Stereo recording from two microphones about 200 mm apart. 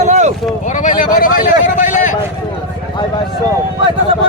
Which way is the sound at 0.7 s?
40° left (ahead or behind).